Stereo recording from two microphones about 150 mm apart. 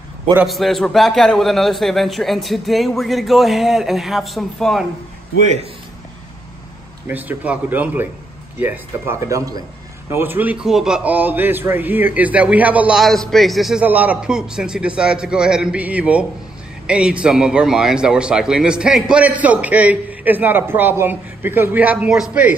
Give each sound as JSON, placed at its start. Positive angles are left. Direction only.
{"t": 0.5, "sound": "a man's voice", "side_deg": 0}
{"t": 7.1, "sound": "a man's voice", "side_deg": -10}